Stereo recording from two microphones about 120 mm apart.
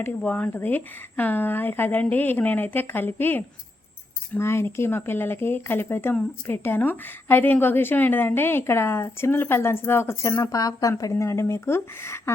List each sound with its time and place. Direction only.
0.2 s a woman's voice: 10° left (ahead or behind)